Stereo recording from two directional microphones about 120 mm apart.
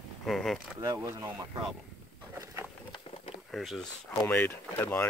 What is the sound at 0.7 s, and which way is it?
Speech, 30° right (ahead or behind).